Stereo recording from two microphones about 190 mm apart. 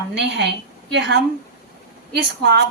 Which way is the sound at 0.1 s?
65° right (ahead or behind).